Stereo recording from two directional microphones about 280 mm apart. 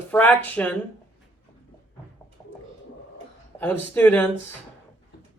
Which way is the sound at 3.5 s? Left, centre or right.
Centre.